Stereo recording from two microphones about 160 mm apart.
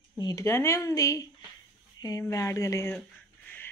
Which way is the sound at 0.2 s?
20° left (ahead or behind).